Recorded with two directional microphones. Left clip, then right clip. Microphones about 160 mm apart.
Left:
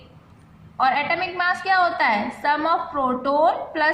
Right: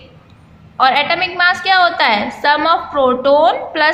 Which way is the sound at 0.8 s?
15° right (ahead or behind).